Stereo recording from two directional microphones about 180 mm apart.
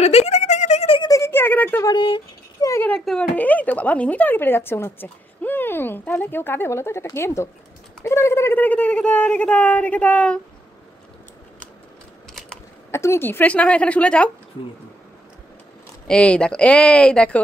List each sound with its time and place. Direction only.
0.0 s a sound: 35° left (ahead or behind)
1.1 s a man's voice: 15° left (ahead or behind)
12.9 s a man's voice: 15° left (ahead or behind)
16.1 s speech: 5° left (ahead or behind)